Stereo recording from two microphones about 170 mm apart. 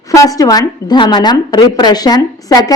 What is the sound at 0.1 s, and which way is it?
A woman's voice, 20° left (ahead or behind).